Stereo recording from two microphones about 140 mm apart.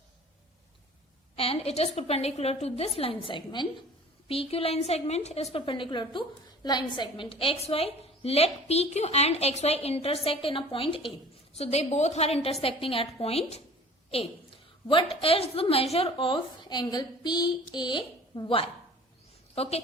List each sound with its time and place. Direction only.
1.4 s a woman's voice: 45° left (ahead or behind)
3.2 s a woman's voice: 35° left (ahead or behind)
14.1 s a sound: 40° left (ahead or behind)
15.1 s a woman's voice: 45° left (ahead or behind)